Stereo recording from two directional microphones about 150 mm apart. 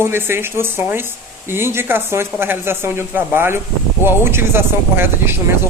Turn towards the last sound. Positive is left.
turn(degrees=-15)  # may be behind; listen again after turning